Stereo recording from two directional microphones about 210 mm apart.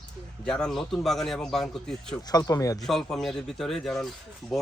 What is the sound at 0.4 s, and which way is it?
Speech, centre (ahead or behind).